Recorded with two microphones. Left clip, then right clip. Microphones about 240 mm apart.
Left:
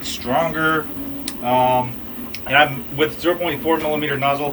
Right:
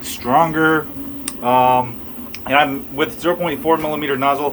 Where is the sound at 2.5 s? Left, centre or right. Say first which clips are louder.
Even; centre.